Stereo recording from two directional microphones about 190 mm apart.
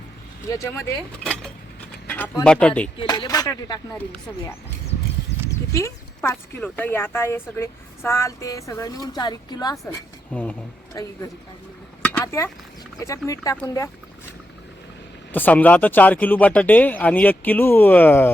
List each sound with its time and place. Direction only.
0.4 s speech: 15° left (ahead or behind)
3.0 s speech: 25° left (ahead or behind)
5.5 s speech: 15° left (ahead or behind)
11.0 s speech: 20° left (ahead or behind)
12.2 s speech: 15° left (ahead or behind)
15.3 s speech: 10° left (ahead or behind)